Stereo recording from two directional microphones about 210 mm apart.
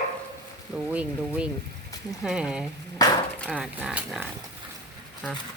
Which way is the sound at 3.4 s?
Centre (ahead or behind).